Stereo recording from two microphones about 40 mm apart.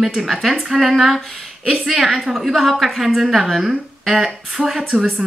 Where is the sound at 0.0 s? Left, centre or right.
Centre.